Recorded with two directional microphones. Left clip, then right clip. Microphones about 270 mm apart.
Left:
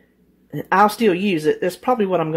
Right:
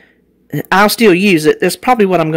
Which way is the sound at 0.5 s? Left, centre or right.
Right.